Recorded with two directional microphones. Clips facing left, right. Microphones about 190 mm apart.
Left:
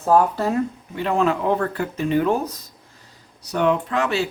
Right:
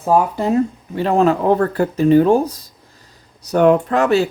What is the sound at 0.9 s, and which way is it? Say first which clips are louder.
Speech: right 5 dB; 35° right (ahead or behind).